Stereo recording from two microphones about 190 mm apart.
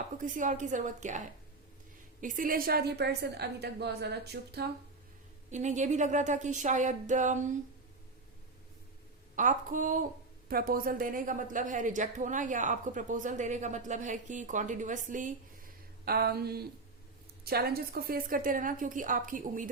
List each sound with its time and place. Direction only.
0.2 s a woman's voice: 45° right (ahead or behind); by 4.7 s 60° right (ahead or behind)
5.5 s a woman's voice: 40° right (ahead or behind)
9.3 s a woman's voice: 45° right (ahead or behind)
16.0 s a woman's voice: 55° right (ahead or behind)